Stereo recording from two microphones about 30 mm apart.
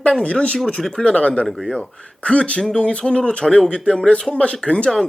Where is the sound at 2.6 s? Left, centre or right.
Left.